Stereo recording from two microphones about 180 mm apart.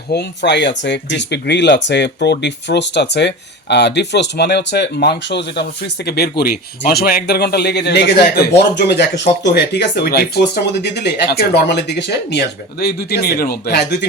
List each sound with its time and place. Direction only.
0.1 s speech: 70° left (ahead or behind)